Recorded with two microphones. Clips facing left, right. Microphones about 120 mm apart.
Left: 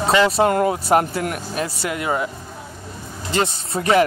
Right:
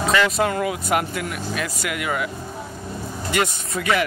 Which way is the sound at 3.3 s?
30° left (ahead or behind).